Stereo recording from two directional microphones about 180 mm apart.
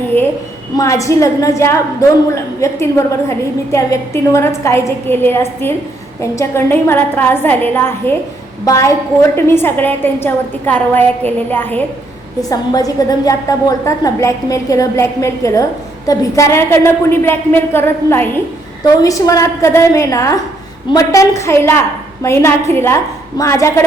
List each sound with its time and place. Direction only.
0.8 s a woman's voice: 15° left (ahead or behind)